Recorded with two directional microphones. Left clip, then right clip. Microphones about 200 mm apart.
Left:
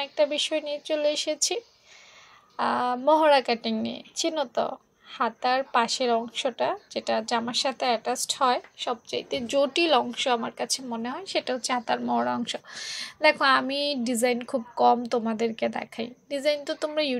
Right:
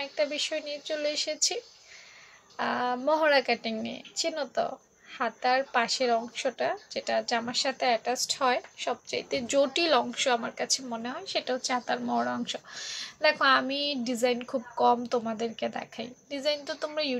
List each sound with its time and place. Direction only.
0.0 s a woman's voice: 30° left (ahead or behind)